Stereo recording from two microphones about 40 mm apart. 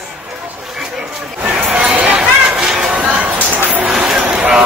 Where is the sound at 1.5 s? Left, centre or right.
Right.